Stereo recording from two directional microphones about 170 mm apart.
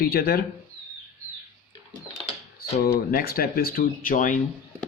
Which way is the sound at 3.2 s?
60° left (ahead or behind).